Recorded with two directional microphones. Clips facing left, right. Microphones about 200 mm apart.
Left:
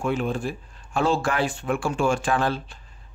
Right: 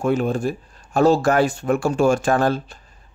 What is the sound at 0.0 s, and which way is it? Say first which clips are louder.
Speech: right 5 dB; 40° right (ahead or behind).